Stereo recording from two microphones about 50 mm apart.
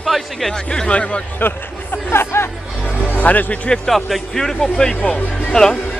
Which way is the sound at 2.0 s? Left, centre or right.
Left.